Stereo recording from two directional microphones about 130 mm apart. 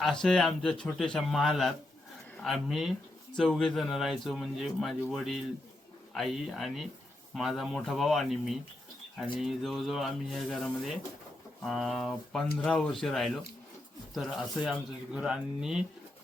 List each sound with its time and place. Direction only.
0.0 s a man's voice: 5° left (ahead or behind)